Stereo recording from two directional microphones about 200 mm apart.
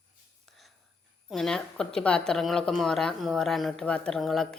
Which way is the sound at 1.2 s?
5° left (ahead or behind).